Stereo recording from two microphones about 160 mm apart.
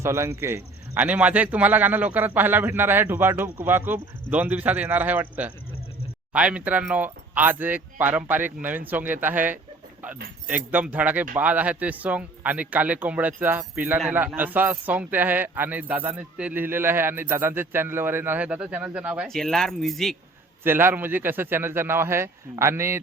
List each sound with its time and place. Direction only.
0.0 s speech: 15° right (ahead or behind); by 20.1 s centre (ahead or behind)
20.7 s speech: 15° right (ahead or behind)